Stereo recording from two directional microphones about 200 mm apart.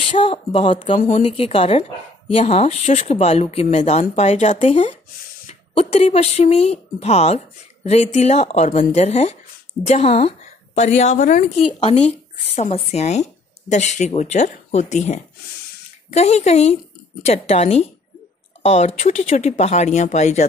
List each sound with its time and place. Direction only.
0.1 s a woman's voice: 25° left (ahead or behind)